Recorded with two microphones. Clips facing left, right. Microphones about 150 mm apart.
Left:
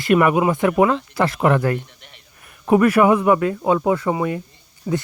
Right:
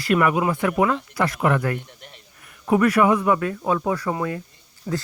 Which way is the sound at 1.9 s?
40° right (ahead or behind).